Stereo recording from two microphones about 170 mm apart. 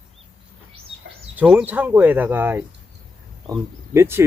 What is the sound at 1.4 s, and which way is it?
Speech, 10° right (ahead or behind).